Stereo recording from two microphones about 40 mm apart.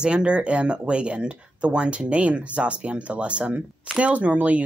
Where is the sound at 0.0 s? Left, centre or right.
Right.